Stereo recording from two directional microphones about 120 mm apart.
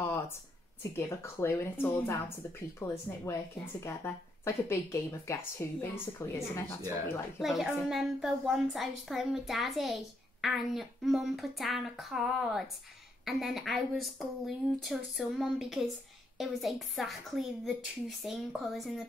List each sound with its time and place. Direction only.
0.9 s speech: 20° left (ahead or behind)
7.3 s speech: centre (ahead or behind)